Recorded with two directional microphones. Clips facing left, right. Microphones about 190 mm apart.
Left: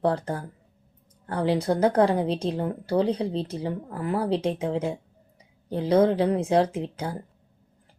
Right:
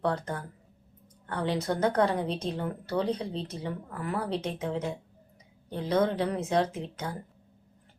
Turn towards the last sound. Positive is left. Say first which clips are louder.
# left 5 dB
turn(degrees=30)  # may be behind; listen again after turning